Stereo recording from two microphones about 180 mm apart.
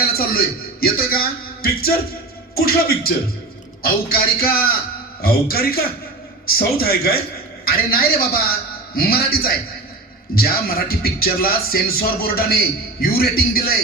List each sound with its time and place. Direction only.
0.1 s a man's voice: 55° left (ahead or behind)